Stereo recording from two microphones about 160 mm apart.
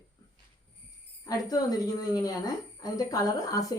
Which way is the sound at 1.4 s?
25° left (ahead or behind).